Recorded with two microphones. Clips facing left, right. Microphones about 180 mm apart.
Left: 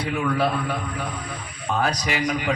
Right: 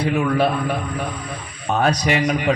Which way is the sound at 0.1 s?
25° right (ahead or behind).